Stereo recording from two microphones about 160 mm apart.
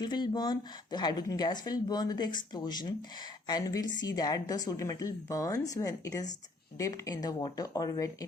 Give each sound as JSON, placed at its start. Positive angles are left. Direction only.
{"t": 0.0, "sound": "a woman's voice", "side_deg": 25}